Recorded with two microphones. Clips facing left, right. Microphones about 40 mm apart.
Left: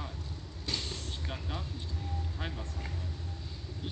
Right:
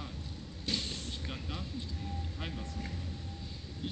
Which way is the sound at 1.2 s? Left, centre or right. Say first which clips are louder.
Left 1 dB; centre.